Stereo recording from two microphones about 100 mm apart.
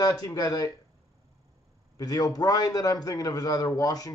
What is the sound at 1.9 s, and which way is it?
A man's voice, 40° left (ahead or behind).